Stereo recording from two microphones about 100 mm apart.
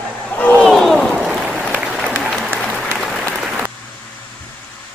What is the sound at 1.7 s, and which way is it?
Applause, 5° right (ahead or behind).